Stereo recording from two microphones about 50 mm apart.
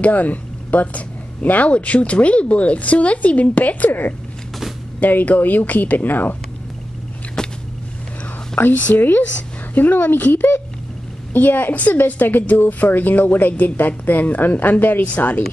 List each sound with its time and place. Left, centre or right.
0.0 s a woman's voice: left
7.4 s vehicle: centre
8.6 s a woman's voice: left